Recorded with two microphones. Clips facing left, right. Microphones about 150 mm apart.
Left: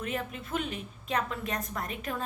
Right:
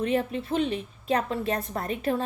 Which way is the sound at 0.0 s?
30° right (ahead or behind).